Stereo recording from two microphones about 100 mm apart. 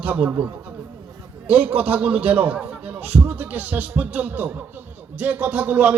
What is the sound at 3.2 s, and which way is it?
Music, 20° right (ahead or behind).